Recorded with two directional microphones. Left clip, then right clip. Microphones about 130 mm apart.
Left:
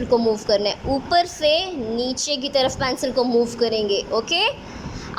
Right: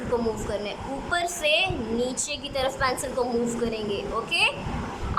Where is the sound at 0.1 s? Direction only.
45° left (ahead or behind).